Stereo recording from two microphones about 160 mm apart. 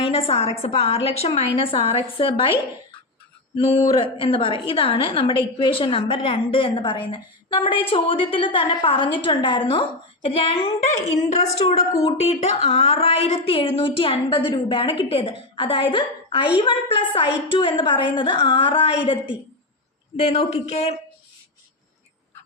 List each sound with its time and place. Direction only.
0.0 s a woman's voice: 35° left (ahead or behind)
3.5 s a woman's voice: 30° left (ahead or behind)